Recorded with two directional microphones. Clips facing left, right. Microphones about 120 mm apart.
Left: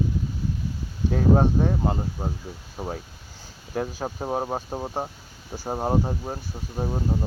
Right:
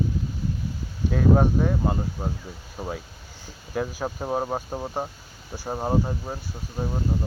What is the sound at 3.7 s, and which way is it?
Speech, 25° left (ahead or behind).